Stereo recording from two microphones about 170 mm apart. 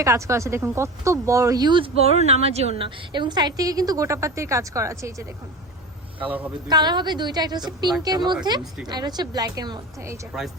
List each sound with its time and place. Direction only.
0.0 s speech: 15° right (ahead or behind)
6.1 s a man's voice: 10° right (ahead or behind)
6.7 s speech: 25° right (ahead or behind)